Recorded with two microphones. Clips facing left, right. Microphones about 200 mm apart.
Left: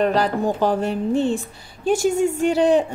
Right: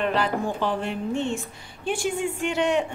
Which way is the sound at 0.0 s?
40° left (ahead or behind).